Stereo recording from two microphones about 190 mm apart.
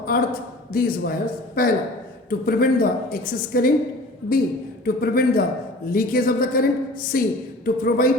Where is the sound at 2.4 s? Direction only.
50° left (ahead or behind).